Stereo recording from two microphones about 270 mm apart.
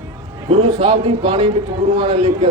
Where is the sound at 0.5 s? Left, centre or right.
Right.